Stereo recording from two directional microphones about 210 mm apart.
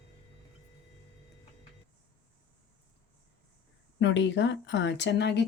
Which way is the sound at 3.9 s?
60° left (ahead or behind).